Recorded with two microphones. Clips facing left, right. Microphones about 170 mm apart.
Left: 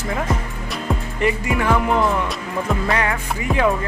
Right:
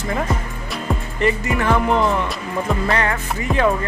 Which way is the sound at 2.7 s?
5° left (ahead or behind).